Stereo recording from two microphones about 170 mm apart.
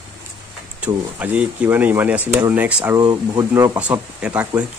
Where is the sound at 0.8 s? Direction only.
10° right (ahead or behind).